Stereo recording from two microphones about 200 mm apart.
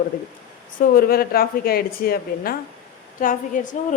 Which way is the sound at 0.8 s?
45° left (ahead or behind).